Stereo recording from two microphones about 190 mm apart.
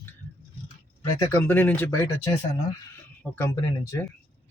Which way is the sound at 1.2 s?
15° left (ahead or behind).